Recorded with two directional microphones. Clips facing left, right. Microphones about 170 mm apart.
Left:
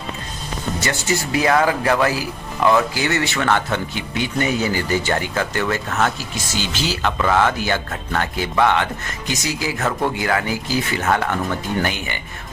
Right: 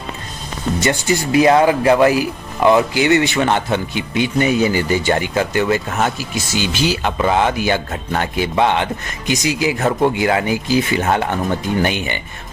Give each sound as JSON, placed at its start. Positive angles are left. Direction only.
{"t": 0.8, "sound": "speech", "side_deg": -20}